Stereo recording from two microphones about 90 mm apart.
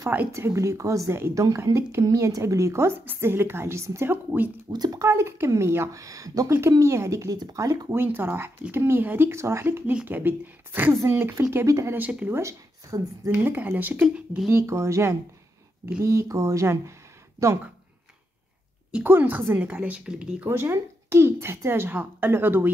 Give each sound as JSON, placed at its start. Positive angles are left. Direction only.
{"t": 0.3, "sound": "a woman's voice", "side_deg": -30}
{"t": 4.6, "sound": "speech", "side_deg": -45}
{"t": 7.9, "sound": "a woman's voice", "side_deg": -25}
{"t": 11.5, "sound": "speech", "side_deg": -35}
{"t": 11.9, "sound": "a woman's voice", "side_deg": -15}
{"t": 12.3, "sound": "speech", "side_deg": -35}
{"t": 13.4, "sound": "a woman's voice", "side_deg": -20}
{"t": 14.5, "sound": "speech", "side_deg": -30}
{"t": 19.0, "sound": "a woman's voice", "side_deg": -20}
{"t": 20.4, "sound": "a woman's voice", "side_deg": -30}